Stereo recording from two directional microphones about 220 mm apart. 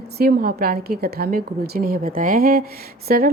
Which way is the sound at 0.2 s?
40° right (ahead or behind).